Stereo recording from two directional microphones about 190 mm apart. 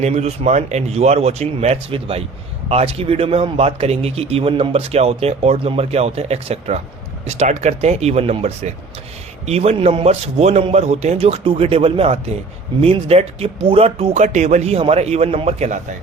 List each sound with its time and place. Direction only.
0.0 s speech: 35° right (ahead or behind)